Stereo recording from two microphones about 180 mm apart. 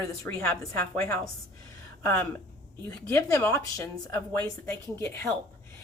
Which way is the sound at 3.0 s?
10° left (ahead or behind).